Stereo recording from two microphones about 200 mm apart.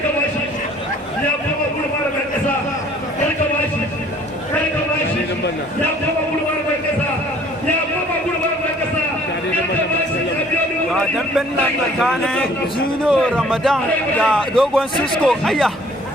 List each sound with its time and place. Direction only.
10.9 s a man's voice: centre (ahead or behind)